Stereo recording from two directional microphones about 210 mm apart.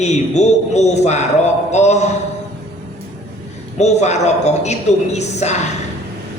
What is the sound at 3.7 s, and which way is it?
A man's voice, 30° left (ahead or behind).